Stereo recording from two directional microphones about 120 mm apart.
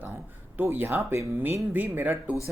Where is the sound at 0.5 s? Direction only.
15° right (ahead or behind).